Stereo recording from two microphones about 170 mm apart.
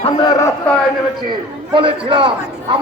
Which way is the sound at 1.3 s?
30° right (ahead or behind).